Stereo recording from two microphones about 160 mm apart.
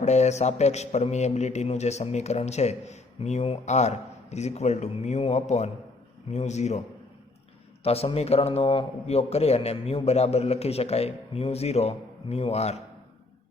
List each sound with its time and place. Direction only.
0.0 s a man's voice: 45° left (ahead or behind)
7.9 s a man's voice: 40° left (ahead or behind)